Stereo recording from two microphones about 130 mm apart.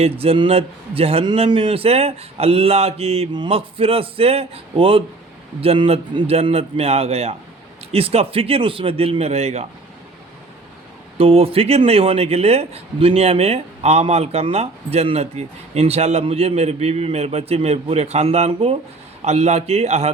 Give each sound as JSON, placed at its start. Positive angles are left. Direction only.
{"t": 0.0, "sound": "a man's voice", "side_deg": -50}
{"t": 3.3, "sound": "a man's voice", "side_deg": -40}
{"t": 11.2, "sound": "a man's voice", "side_deg": -50}